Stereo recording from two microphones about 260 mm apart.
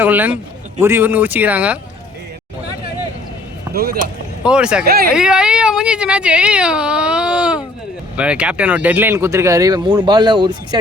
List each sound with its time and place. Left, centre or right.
0.0 s speech: centre
4.4 s speech: centre
4.8 s speech: right
5.1 s speech: centre